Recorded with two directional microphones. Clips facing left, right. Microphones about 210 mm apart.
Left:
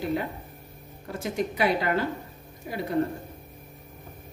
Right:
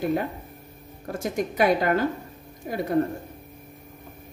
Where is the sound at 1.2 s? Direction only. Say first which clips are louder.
Right 3 dB; 45° right (ahead or behind).